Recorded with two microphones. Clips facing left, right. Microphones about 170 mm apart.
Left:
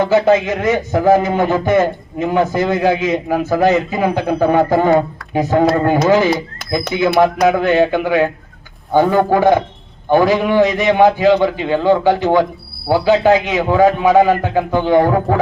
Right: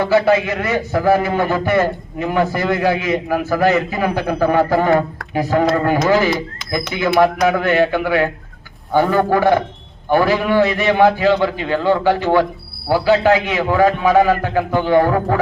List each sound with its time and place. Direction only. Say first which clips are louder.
0.0 s a man's voice: left 2 dB; 20° left (ahead or behind)